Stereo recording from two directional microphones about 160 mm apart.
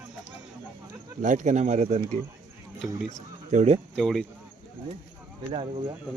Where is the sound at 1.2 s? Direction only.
50° right (ahead or behind).